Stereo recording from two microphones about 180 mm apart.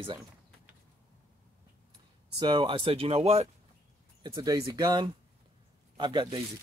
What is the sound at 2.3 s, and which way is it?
Speech, 25° right (ahead or behind).